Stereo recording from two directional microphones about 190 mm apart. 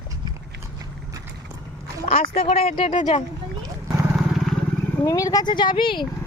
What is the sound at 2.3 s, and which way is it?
Speech, 30° left (ahead or behind).